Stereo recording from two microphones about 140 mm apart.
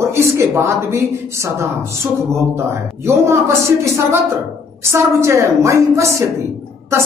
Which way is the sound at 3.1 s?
20° right (ahead or behind).